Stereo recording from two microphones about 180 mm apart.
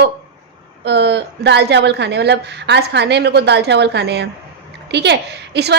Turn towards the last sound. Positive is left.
turn(degrees=-65)  # may be behind; listen again after turning